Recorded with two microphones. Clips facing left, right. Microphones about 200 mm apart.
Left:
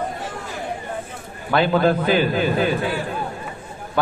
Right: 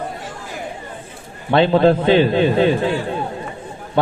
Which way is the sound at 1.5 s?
25° right (ahead or behind).